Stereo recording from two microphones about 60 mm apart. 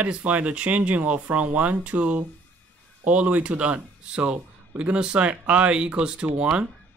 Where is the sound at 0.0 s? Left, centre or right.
Right.